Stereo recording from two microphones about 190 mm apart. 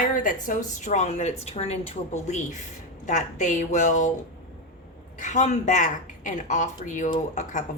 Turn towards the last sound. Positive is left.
turn(degrees=40)  # may be behind; listen again after turning